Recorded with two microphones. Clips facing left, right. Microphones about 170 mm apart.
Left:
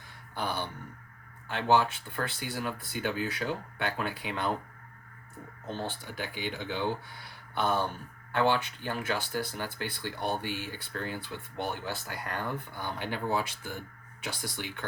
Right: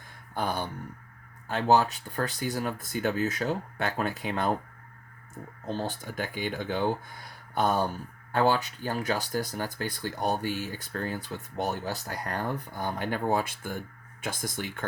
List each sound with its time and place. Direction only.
0.3 s a sound: 45° right (ahead or behind)
1.5 s speech: 40° right (ahead or behind)
5.6 s speech: 40° right (ahead or behind)